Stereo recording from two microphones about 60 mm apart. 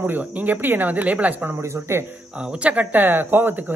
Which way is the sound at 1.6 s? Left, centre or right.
Right.